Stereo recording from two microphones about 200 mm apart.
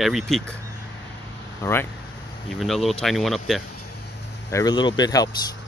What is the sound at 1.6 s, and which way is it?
Speech, 10° left (ahead or behind).